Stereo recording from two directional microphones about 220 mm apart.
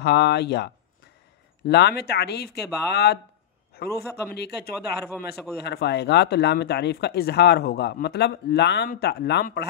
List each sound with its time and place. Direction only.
0.0 s speech: 50° left (ahead or behind)
1.7 s speech: 50° left (ahead or behind)